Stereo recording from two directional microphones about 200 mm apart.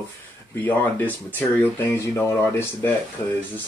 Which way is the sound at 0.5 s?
10° left (ahead or behind).